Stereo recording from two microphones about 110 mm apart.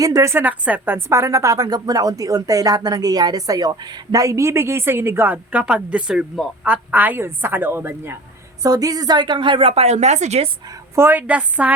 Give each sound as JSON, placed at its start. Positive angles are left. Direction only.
{"t": 0.0, "sound": "a woman's voice", "side_deg": -30}
{"t": 8.6, "sound": "speech", "side_deg": -35}
{"t": 9.8, "sound": "speech", "side_deg": -90}
{"t": 10.9, "sound": "a woman's voice", "side_deg": -20}